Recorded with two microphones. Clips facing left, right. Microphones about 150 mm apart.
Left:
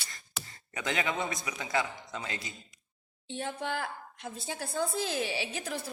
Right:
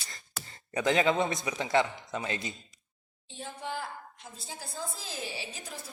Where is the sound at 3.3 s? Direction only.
70° left (ahead or behind).